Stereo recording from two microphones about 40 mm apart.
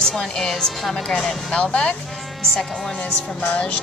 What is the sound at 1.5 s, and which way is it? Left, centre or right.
Speech, left.